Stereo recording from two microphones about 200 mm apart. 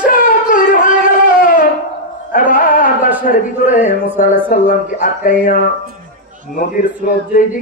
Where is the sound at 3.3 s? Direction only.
40° left (ahead or behind).